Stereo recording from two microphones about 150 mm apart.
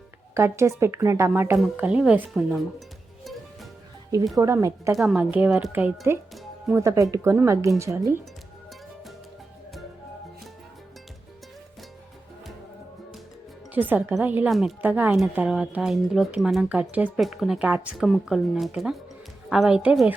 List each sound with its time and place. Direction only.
0.3 s a woman's voice: 20° right (ahead or behind)
4.4 s speech: 20° right (ahead or behind)
4.9 s a woman's voice: 5° right (ahead or behind); by 8.2 s 20° right (ahead or behind)
13.7 s a woman's voice: 10° right (ahead or behind)